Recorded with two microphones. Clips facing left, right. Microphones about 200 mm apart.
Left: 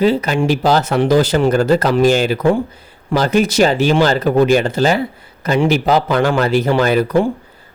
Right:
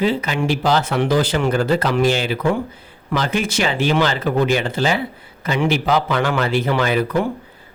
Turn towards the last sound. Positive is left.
turn(degrees=40)  # may be behind; listen again after turning